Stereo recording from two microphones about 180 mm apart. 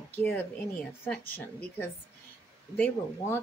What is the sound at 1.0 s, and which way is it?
Speech, 10° left (ahead or behind).